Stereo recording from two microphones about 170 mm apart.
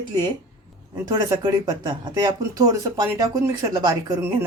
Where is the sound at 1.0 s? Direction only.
25° right (ahead or behind).